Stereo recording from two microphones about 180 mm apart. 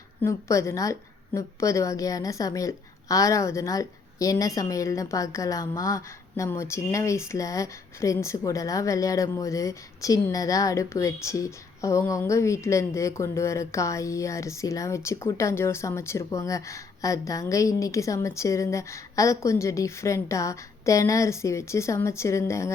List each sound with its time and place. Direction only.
0.2 s a woman's voice: 15° left (ahead or behind)